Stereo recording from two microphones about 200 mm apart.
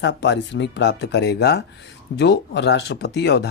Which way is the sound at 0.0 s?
60° left (ahead or behind).